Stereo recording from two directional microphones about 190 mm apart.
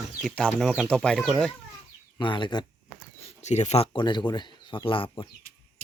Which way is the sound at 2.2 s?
25° left (ahead or behind).